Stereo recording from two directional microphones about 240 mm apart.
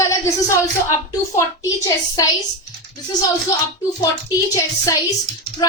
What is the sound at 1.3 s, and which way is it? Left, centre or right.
Speech, centre.